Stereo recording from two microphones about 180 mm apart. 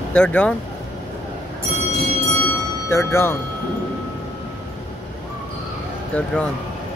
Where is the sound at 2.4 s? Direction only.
15° left (ahead or behind).